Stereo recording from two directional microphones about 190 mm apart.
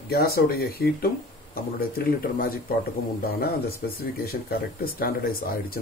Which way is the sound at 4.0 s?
55° left (ahead or behind).